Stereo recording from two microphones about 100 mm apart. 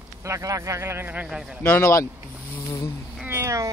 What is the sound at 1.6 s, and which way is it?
Speech, 15° left (ahead or behind).